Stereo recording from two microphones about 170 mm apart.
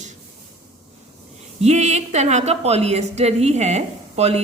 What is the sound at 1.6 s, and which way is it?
Speech, 40° right (ahead or behind).